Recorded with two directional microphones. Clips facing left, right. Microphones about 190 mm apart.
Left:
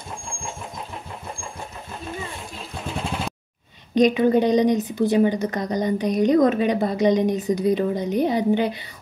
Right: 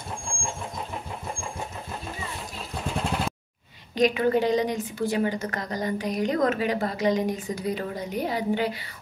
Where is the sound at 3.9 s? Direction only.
20° left (ahead or behind).